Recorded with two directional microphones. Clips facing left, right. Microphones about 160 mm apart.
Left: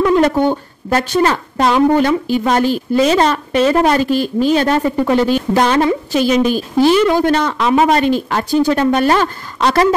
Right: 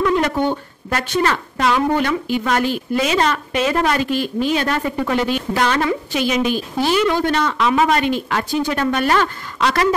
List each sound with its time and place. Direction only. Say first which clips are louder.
0.0 s a woman's voice: left 5 dB; 35° left (ahead or behind)